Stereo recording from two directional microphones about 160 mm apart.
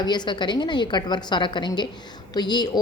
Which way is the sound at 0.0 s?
25° left (ahead or behind).